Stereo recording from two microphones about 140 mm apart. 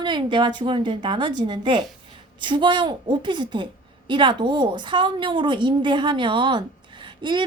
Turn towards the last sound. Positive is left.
turn(degrees=-35)  # may be behind; listen again after turning